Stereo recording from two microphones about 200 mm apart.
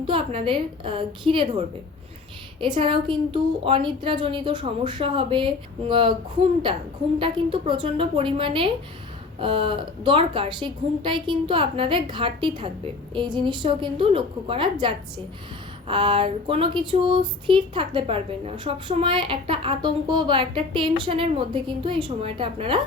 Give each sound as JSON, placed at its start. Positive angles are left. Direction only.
{"t": 0.0, "sound": "speech", "side_deg": -25}
{"t": 7.2, "sound": "speech", "side_deg": -25}